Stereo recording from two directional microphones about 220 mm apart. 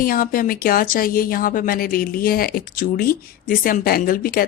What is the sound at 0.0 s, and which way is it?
A woman's voice, 40° left (ahead or behind).